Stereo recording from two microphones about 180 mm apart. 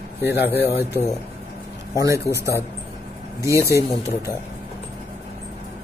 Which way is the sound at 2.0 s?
15° right (ahead or behind).